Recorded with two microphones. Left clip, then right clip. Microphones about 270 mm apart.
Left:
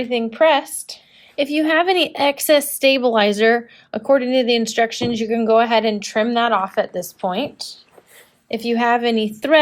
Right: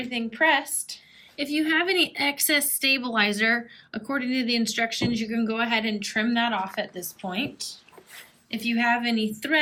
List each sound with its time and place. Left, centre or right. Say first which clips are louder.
0.1 s a woman's voice: left 7 dB; centre